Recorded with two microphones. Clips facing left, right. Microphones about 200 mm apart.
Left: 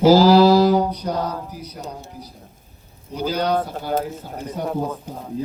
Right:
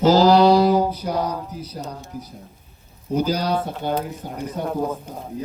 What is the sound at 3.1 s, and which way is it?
Speech, 45° right (ahead or behind).